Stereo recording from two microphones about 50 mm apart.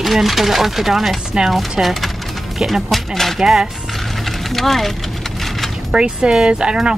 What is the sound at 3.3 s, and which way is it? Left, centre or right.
Speech, centre.